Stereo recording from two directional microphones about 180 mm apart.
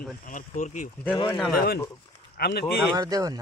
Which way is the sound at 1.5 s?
55° left (ahead or behind).